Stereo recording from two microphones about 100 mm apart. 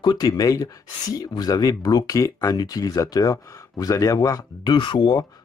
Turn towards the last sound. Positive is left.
turn(degrees=45)  # may be behind; listen again after turning